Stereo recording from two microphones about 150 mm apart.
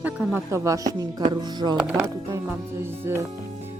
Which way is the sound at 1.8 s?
15° right (ahead or behind).